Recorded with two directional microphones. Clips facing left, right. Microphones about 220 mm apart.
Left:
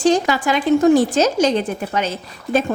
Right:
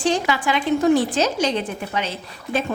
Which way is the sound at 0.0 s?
40° left (ahead or behind).